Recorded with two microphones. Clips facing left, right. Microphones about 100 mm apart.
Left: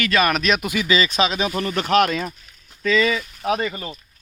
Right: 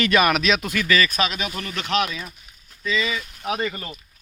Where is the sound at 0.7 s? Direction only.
15° left (ahead or behind); by 2.0 s 40° left (ahead or behind).